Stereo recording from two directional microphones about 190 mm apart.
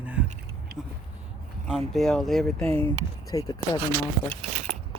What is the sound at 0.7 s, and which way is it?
Speech, 50° right (ahead or behind).